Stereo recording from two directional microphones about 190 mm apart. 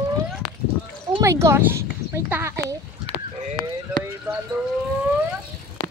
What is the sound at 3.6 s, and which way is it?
Clip-clop, 90° left.